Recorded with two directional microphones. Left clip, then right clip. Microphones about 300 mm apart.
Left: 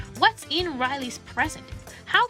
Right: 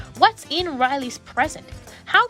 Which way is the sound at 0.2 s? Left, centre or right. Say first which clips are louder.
Right 4 dB; right.